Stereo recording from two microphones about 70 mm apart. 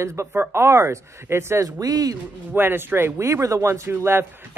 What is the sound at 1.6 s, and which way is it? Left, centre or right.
Speech, right.